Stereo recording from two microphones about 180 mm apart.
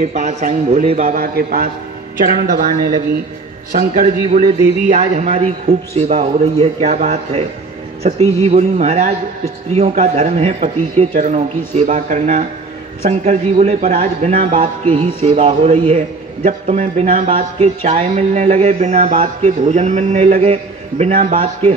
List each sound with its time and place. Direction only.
0.1 s a man's voice: 40° right (ahead or behind)